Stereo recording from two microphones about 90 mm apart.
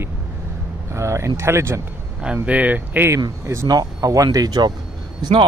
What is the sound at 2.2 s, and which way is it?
Speech, 15° right (ahead or behind).